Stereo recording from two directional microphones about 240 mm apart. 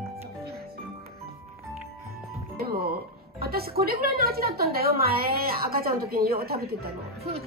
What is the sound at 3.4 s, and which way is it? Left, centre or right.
A woman's voice, right.